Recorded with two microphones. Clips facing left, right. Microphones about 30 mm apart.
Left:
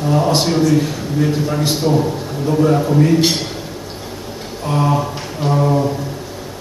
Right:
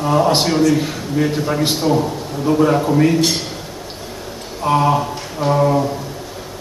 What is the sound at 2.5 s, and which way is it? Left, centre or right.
Speech, centre.